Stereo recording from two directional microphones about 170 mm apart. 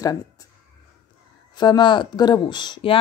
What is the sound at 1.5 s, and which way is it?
Speech, 25° left (ahead or behind).